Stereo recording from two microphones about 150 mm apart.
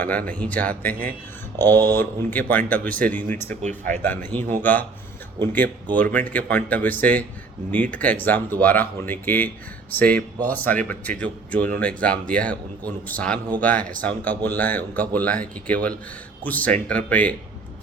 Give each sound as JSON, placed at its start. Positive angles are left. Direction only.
{"t": 0.0, "sound": "speech", "side_deg": 10}